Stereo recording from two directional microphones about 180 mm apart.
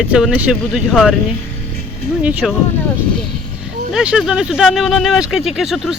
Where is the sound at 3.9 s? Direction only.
5° right (ahead or behind).